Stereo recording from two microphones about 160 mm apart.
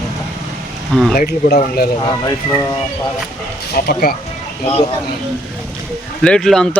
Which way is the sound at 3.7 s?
70° left (ahead or behind).